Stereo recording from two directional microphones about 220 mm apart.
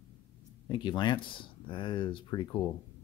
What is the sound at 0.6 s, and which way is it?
Speech, 20° left (ahead or behind).